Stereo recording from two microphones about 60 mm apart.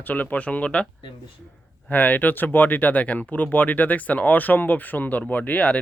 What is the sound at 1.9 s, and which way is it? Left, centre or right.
Speech, left.